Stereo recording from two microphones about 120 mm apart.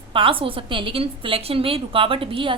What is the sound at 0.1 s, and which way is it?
A woman's voice, 45° right (ahead or behind).